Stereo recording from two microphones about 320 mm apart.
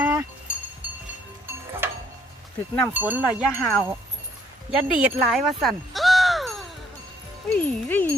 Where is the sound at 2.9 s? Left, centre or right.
Centre.